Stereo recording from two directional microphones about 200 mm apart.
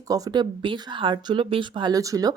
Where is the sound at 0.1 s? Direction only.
20° right (ahead or behind).